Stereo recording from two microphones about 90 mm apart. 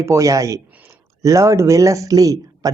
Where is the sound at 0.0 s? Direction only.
35° right (ahead or behind).